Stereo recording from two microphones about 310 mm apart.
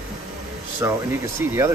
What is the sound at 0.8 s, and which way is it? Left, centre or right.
Speech, centre.